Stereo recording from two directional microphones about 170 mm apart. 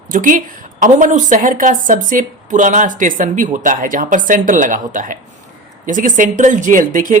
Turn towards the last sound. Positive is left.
turn(degrees=-50)  # may be behind; listen again after turning